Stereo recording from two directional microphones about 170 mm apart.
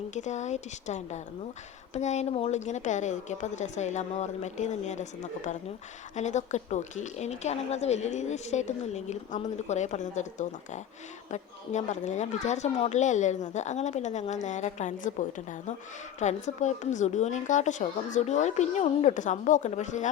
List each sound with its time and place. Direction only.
0.1 s a woman's voice: 45° left (ahead or behind)
16.2 s a woman's voice: 45° left (ahead or behind)